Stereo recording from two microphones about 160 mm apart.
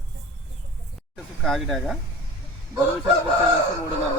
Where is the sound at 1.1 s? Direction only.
Centre (ahead or behind).